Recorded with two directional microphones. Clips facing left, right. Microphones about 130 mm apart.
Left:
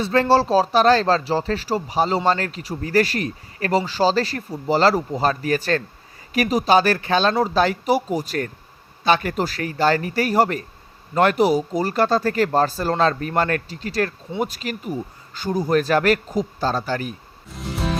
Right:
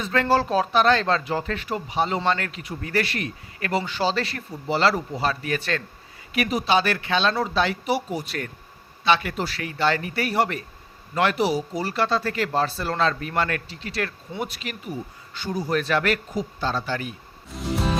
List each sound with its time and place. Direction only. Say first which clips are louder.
0.0 s speech: left 4 dB; 35° left (ahead or behind)
17.5 s music: right 1 dB; centre (ahead or behind)